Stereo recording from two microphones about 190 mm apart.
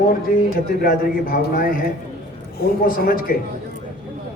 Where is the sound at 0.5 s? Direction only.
50° left (ahead or behind).